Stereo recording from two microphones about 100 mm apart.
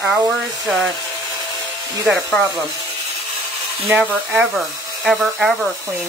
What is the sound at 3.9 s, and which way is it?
Speech, 15° right (ahead or behind).